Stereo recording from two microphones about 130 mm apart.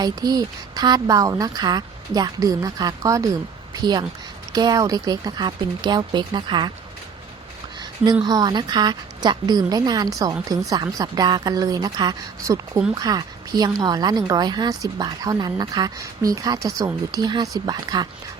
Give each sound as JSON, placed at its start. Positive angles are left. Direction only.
{"t": 0.0, "sound": "a woman's voice", "side_deg": -30}
{"t": 8.2, "sound": "a woman's voice", "side_deg": -30}